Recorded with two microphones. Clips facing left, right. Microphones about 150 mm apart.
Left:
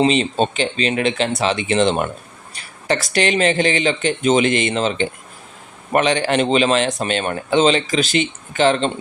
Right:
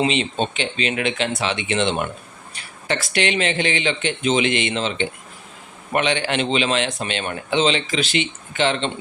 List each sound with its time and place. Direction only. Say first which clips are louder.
0.0 s speech: left 5 dB; 40° left (ahead or behind)